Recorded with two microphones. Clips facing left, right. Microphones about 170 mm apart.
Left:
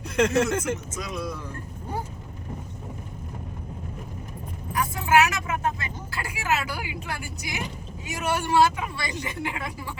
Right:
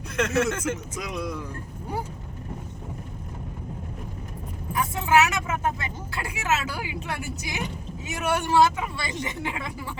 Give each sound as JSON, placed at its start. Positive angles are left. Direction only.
{"t": 0.2, "sound": "speech", "side_deg": 35}
{"t": 0.9, "sound": "speech", "side_deg": -15}
{"t": 4.7, "sound": "speech", "side_deg": -25}